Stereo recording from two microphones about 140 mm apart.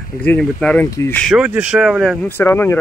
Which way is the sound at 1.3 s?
10° right (ahead or behind).